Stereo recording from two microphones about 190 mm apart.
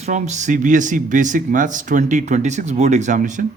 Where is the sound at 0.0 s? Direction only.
40° right (ahead or behind).